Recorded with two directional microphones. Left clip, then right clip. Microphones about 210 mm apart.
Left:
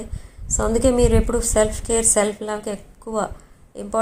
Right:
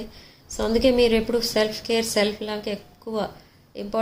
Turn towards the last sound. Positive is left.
turn(degrees=5)  # may be behind; listen again after turning